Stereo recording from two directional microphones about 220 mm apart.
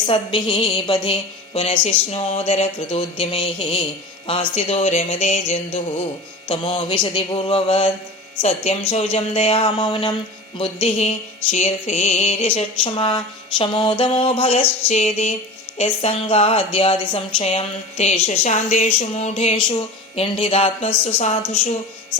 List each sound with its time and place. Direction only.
0.0 s a woman's voice: 20° left (ahead or behind)